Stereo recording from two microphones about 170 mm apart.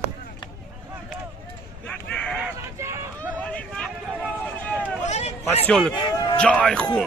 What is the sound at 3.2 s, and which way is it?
Vehicle, 10° left (ahead or behind).